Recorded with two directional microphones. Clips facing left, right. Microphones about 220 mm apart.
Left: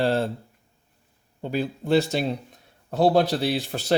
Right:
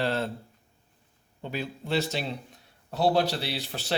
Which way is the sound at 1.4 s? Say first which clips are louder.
Left 7 dB; 45° left (ahead or behind).